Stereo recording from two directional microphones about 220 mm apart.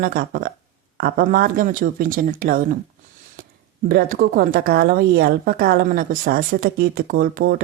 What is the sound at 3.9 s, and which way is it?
Speech, 45° right (ahead or behind).